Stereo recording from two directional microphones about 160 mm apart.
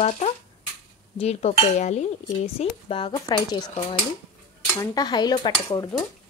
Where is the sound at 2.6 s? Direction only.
35° left (ahead or behind).